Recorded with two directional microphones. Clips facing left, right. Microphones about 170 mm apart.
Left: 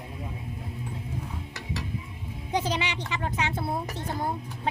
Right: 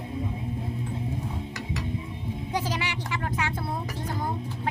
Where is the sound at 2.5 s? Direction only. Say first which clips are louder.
Left 3 dB; 20° left (ahead or behind).